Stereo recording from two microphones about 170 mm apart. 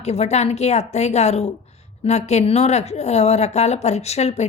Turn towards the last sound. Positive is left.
turn(degrees=40)  # may be behind; listen again after turning